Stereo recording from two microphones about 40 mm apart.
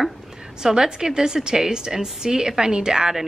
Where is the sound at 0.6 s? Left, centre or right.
Centre.